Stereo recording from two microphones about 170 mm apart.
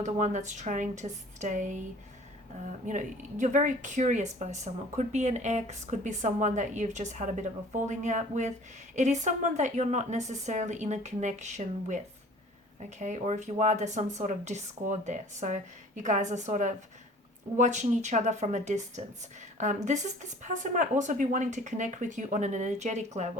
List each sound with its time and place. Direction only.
0.0 s speech: 45° right (ahead or behind)
2.8 s speech: 45° right (ahead or behind)
13.0 s speech: 45° right (ahead or behind)